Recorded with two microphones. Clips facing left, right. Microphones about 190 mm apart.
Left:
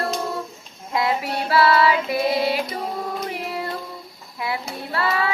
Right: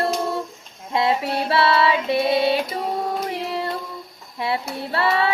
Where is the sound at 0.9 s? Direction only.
25° right (ahead or behind).